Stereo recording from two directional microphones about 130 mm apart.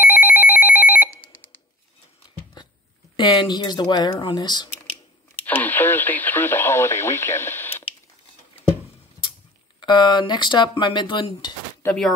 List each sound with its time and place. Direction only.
0.2 s telephone bell ringing: 15° left (ahead or behind)
2.6 s a sound: 35° left (ahead or behind)
3.2 s speech: 35° left (ahead or behind)
5.5 s speech: 15° left (ahead or behind)
9.8 s speech: 35° left (ahead or behind)